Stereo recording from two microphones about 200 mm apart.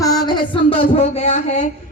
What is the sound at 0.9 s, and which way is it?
Speech, 35° left (ahead or behind).